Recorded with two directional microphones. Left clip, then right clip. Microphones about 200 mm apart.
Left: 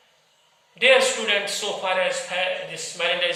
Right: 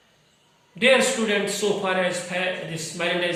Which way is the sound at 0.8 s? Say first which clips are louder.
Left 1 dB; 20° left (ahead or behind).